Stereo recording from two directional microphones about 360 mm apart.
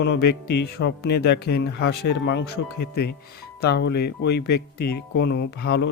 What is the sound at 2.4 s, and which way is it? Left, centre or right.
Speech, left.